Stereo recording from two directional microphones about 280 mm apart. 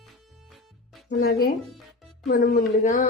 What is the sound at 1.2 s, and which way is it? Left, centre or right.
Speech, left.